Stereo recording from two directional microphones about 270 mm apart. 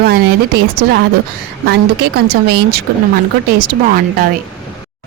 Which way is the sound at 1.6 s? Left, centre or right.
Right.